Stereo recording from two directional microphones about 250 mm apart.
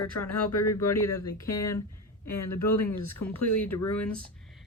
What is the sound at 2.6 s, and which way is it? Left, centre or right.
Speech, left.